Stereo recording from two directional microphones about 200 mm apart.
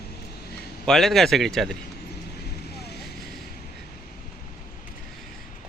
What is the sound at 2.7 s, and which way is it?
Vehicle, 55° left (ahead or behind).